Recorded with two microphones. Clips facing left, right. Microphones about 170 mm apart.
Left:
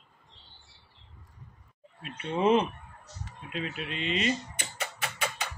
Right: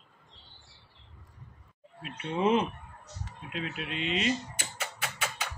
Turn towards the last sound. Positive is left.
turn(degrees=-5)  # may be behind; listen again after turning